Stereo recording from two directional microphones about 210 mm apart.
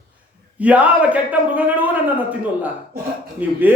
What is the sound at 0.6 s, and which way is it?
A man's voice, 5° right (ahead or behind).